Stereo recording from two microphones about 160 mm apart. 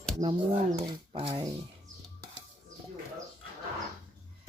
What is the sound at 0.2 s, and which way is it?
Speech, 30° right (ahead or behind).